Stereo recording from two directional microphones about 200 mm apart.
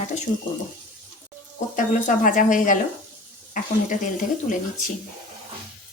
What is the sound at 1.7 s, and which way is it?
Speech, 40° left (ahead or behind).